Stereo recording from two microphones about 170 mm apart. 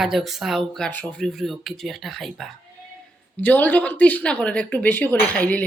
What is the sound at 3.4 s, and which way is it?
Speech, 10° left (ahead or behind).